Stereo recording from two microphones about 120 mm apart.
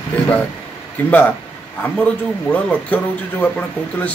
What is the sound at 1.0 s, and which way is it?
Speech, 15° left (ahead or behind).